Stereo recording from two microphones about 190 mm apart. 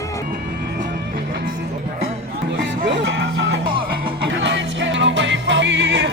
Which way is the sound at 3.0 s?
70° right (ahead or behind).